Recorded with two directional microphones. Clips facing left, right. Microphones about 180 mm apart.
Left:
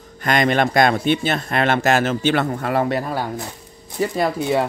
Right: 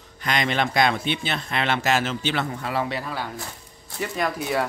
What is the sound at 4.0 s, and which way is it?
Speech, 30° left (ahead or behind).